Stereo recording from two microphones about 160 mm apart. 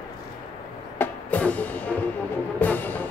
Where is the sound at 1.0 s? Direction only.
10° left (ahead or behind).